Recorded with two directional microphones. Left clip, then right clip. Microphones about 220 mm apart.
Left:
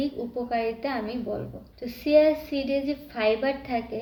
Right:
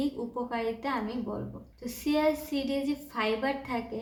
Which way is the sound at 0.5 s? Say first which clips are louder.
Left 5 dB; 10° right (ahead or behind).